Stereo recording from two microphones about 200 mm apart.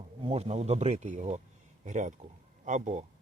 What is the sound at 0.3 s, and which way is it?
A man's voice, 30° right (ahead or behind).